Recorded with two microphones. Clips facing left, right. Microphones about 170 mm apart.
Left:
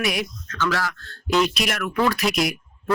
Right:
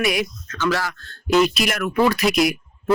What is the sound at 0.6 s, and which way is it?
Speech, 15° right (ahead or behind).